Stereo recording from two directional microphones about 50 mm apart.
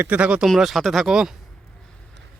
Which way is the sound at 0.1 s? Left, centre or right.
Right.